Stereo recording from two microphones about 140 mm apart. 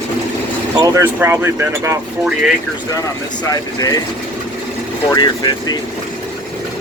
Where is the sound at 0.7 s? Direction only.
25° right (ahead or behind).